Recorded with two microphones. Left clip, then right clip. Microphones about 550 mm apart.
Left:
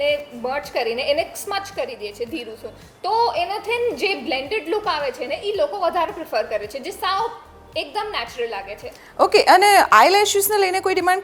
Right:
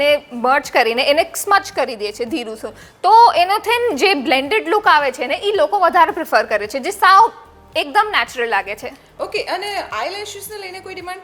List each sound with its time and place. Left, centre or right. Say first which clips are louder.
0.0 s a woman's voice: right 6 dB; right
9.1 s a woman's voice: left 10 dB; left